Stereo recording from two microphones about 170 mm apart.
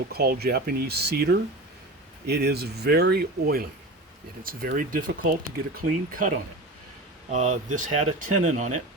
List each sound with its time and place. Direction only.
0.1 s speech: 65° right (ahead or behind); by 8.8 s 45° right (ahead or behind)